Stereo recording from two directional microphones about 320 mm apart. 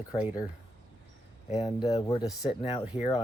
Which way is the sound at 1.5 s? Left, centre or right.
Centre.